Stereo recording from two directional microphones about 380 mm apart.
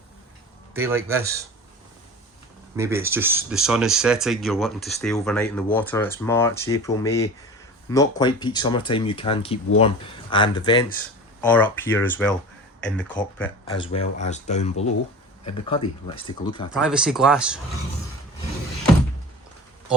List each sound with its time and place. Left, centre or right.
0.7 s a man's voice: centre
2.7 s speech: centre
13.8 s speech: centre
16.7 s speech: centre